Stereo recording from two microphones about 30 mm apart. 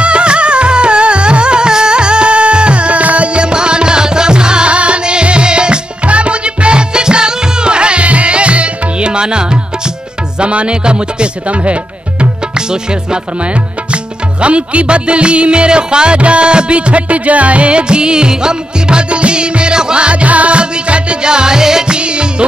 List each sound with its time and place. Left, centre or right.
0.0 s music: right
3.3 s music: right
4.7 s music: right
6.0 s music: right
11.4 s music: right
14.4 s music: right
19.0 s music: right; by 21.8 s centre
21.8 s music: right